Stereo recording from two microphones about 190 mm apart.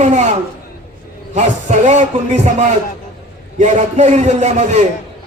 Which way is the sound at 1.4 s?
40° right (ahead or behind).